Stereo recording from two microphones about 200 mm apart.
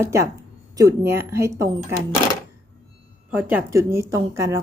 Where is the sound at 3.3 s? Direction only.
10° right (ahead or behind).